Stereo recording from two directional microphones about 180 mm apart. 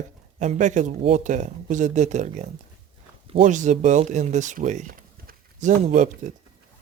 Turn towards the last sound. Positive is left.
turn(degrees=-40)  # may be behind; listen again after turning